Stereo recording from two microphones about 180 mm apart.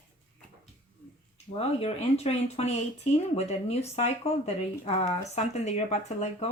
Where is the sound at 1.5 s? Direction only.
35° left (ahead or behind).